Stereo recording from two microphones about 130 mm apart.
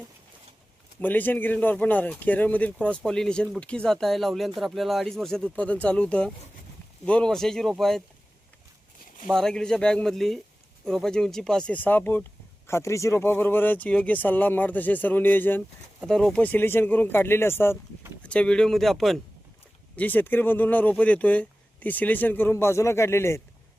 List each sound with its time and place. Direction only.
1.0 s speech: 15° left (ahead or behind)
9.3 s speech: 5° left (ahead or behind)
16.0 s speech: 5° left (ahead or behind)
20.0 s speech: 15° left (ahead or behind)